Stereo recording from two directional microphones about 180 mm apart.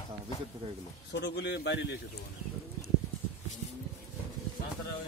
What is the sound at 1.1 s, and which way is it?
Speech, 70° left (ahead or behind).